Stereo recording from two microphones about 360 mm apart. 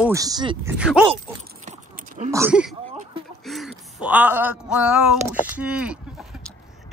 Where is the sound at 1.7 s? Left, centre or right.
Centre.